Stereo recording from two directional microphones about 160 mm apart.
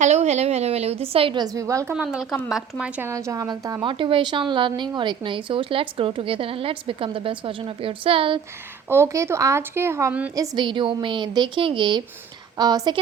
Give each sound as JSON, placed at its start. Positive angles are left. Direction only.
{"t": 0.0, "sound": "a woman's voice", "side_deg": -45}
{"t": 2.0, "sound": "a woman's voice", "side_deg": -5}
{"t": 3.8, "sound": "a woman's voice", "side_deg": -30}
{"t": 8.9, "sound": "speech", "side_deg": -15}
{"t": 10.3, "sound": "a woman's voice", "side_deg": -25}